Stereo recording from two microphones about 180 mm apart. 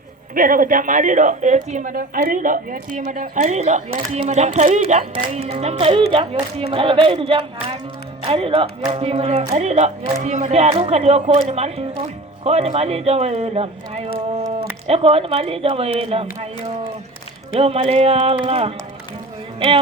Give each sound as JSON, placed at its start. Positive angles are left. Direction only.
{"t": 0.3, "sound": "a woman's voice", "side_deg": -50}